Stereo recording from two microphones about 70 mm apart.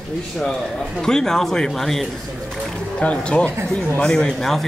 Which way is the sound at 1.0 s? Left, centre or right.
Centre.